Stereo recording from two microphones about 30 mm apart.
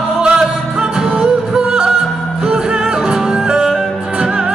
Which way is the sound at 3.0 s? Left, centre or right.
Right.